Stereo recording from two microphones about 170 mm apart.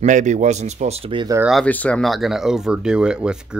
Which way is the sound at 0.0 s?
45° right (ahead or behind).